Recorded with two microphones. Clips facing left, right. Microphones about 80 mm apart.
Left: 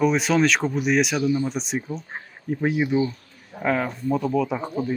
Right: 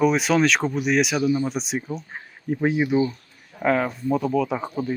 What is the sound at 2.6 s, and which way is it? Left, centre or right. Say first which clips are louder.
Speech: right 1 dB; right.